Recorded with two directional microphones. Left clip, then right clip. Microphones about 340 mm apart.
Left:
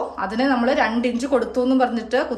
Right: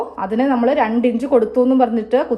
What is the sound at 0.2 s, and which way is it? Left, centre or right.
A woman's voice, centre.